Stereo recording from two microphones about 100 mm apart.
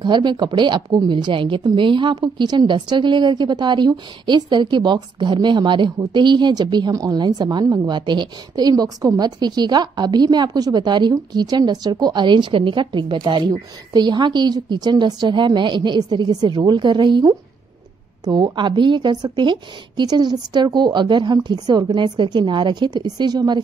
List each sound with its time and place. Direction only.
0.0 s a woman's voice: 50° right (ahead or behind)